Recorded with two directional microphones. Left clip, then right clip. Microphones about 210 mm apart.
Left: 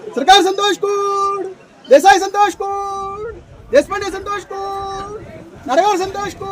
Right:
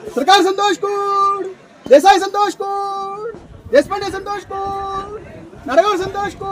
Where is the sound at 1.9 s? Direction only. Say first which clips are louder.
Even; 15° right (ahead or behind).